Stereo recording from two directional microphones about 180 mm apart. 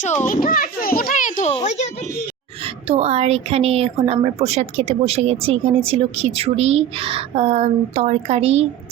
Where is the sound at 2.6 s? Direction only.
30° right (ahead or behind).